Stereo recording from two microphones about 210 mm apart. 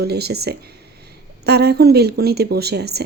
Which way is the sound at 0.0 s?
50° right (ahead or behind).